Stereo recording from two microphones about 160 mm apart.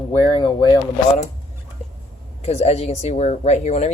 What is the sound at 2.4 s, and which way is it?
Speech, 40° left (ahead or behind).